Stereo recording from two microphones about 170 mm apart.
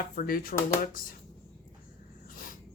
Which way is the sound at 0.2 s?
55° left (ahead or behind).